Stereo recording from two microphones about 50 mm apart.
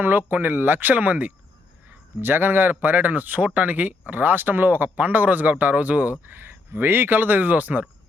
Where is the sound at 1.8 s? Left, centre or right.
Right.